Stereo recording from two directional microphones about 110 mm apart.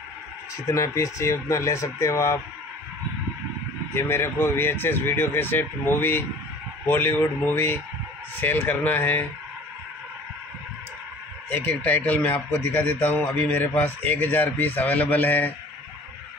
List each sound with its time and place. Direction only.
0.7 s speech: 30° left (ahead or behind)
3.9 s speech: 20° left (ahead or behind)
11.5 s speech: 15° left (ahead or behind)